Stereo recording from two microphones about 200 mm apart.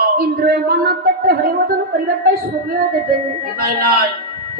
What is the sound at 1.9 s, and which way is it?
Music, 50° right (ahead or behind).